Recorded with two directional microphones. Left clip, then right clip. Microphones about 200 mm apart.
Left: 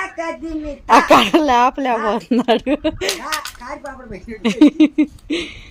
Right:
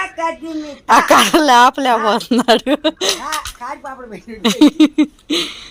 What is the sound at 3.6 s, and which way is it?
Speech, 40° right (ahead or behind).